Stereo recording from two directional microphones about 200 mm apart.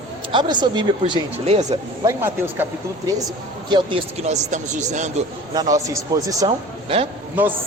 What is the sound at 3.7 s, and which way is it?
Speech, 25° right (ahead or behind).